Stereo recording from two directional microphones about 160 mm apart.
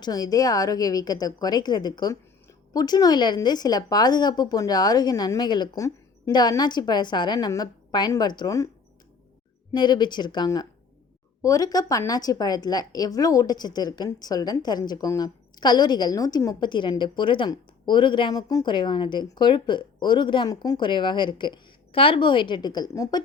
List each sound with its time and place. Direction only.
0.0 s a woman's voice: 25° left (ahead or behind)
9.7 s a woman's voice: 30° left (ahead or behind)